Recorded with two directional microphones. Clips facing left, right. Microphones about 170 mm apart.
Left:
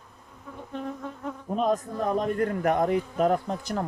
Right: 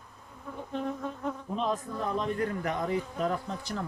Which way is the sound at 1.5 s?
50° left (ahead or behind).